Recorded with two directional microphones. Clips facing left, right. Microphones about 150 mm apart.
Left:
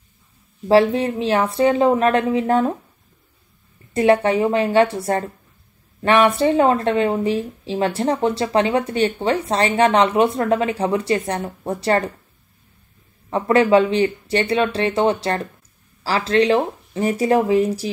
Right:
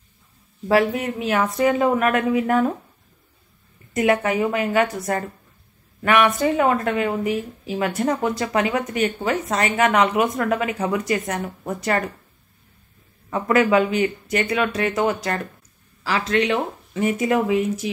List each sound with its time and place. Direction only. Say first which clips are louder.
0.7 s speech: left 4 dB; 30° left (ahead or behind)
3.9 s speech: left 4 dB; 30° left (ahead or behind)
13.3 s speech: left 3 dB; 30° left (ahead or behind)